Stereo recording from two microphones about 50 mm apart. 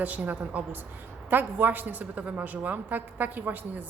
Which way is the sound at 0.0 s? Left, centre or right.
Right.